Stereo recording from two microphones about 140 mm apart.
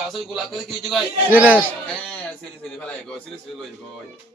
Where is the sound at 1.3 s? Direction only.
10° right (ahead or behind).